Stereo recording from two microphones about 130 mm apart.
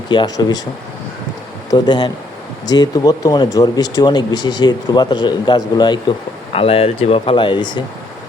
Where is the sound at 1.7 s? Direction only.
35° left (ahead or behind).